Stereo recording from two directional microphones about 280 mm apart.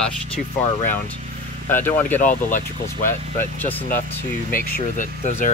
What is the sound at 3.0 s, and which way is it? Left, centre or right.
Speech, centre.